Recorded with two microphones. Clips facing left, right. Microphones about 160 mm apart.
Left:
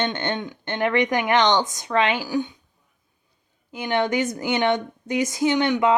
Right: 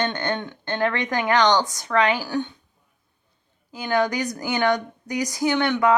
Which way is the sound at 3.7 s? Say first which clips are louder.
Even; 25° left (ahead or behind).